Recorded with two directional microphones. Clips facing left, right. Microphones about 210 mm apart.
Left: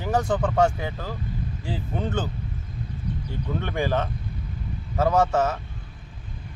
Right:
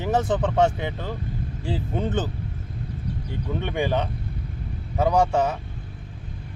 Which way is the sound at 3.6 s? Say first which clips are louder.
Right 1 dB; 15° right (ahead or behind).